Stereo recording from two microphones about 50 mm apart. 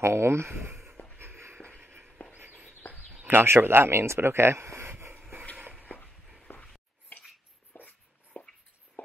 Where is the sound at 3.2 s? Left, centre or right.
Right.